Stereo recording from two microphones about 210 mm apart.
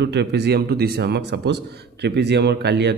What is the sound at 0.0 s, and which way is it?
Speech, 55° right (ahead or behind).